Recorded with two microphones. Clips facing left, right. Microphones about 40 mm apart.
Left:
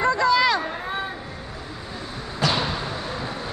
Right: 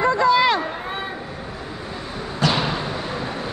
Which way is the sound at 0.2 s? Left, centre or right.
Right.